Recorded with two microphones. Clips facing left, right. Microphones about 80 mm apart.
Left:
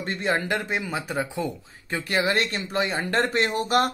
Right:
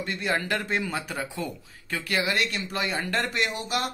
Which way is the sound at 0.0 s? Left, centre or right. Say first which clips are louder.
Left 2 dB; left.